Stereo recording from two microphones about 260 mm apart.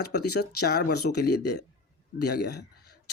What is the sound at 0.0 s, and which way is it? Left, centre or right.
Speech, left.